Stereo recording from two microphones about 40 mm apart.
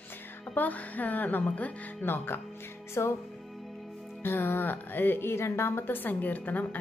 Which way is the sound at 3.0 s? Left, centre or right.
Left.